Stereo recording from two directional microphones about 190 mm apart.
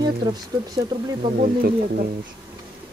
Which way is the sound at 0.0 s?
20° right (ahead or behind).